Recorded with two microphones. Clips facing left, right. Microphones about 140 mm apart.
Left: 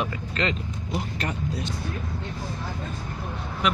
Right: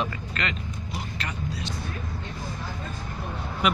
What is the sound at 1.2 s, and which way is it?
Speech, 50° left (ahead or behind).